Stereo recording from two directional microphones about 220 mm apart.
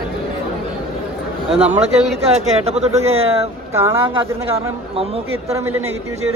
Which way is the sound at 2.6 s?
30° right (ahead or behind).